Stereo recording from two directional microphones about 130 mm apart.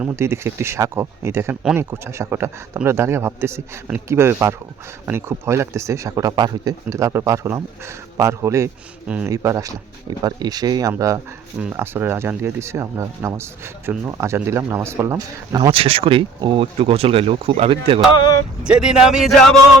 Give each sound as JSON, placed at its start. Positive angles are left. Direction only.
{"t": 0.2, "sound": "speech", "side_deg": -20}
{"t": 9.0, "sound": "speech", "side_deg": -10}
{"t": 9.3, "sound": "speech", "side_deg": -25}
{"t": 15.7, "sound": "speech", "side_deg": -45}
{"t": 18.1, "sound": "speech", "side_deg": 35}
{"t": 18.6, "sound": "speech", "side_deg": -5}